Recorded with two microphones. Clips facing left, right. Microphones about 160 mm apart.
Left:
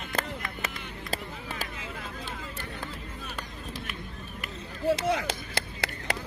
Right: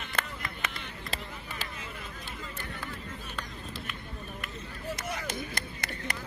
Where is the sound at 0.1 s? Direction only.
70° left (ahead or behind).